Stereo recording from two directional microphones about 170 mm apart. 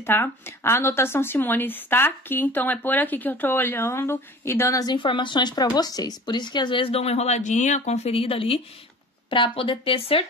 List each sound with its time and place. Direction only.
0.0 s speech: 10° left (ahead or behind); by 10.2 s 30° left (ahead or behind)